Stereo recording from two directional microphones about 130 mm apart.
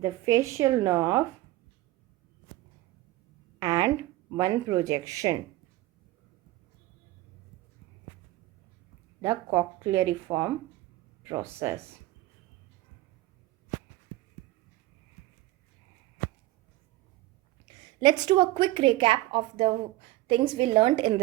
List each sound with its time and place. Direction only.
0.0 s speech: 25° right (ahead or behind)
3.6 s speech: 30° right (ahead or behind)
9.2 s speech: 20° right (ahead or behind)
17.7 s a woman's voice: 35° right (ahead or behind)